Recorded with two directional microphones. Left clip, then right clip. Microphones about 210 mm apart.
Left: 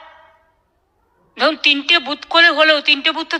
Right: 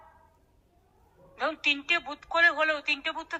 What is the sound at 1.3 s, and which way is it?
A man's voice, 45° left (ahead or behind).